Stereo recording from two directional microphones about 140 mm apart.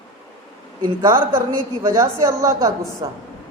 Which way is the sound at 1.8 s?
20° right (ahead or behind).